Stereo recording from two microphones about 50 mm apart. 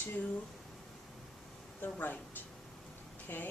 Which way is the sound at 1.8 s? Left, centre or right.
Left.